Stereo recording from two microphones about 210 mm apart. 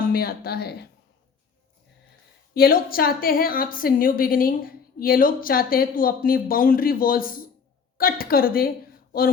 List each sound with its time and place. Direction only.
0.0 s speech: 45° left (ahead or behind)
2.6 s a woman's voice: 45° left (ahead or behind)